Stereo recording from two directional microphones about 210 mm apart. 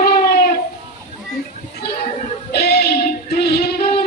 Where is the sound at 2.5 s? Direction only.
50° left (ahead or behind).